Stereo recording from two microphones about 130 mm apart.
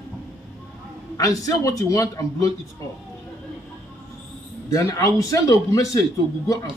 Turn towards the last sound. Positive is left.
turn(degrees=25)  # may be behind; listen again after turning